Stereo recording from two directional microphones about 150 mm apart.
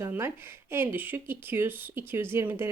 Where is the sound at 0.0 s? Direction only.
15° right (ahead or behind).